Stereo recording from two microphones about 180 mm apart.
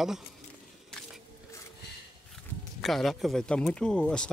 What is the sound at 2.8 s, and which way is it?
Speech, centre (ahead or behind).